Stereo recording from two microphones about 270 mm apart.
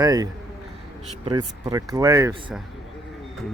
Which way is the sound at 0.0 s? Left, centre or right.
Centre.